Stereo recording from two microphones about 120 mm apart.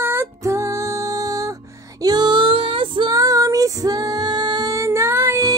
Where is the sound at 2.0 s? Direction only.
35° right (ahead or behind).